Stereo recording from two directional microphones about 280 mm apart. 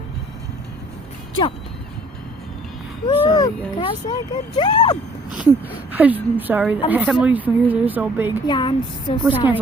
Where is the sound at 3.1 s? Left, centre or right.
Centre.